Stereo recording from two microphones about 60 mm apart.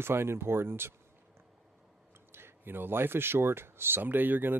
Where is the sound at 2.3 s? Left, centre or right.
Right.